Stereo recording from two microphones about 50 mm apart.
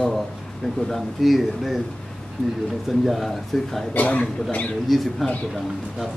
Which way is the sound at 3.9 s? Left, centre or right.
Left.